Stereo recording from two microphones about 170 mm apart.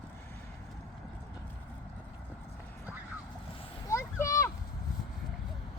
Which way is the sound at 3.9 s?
15° left (ahead or behind).